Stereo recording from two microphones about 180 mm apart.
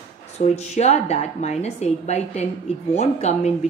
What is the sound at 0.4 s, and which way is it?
A woman's voice, 40° left (ahead or behind).